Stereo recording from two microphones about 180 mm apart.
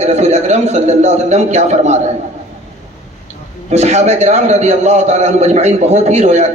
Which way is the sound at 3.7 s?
40° right (ahead or behind).